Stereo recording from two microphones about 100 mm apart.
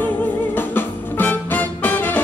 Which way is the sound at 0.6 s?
20° left (ahead or behind).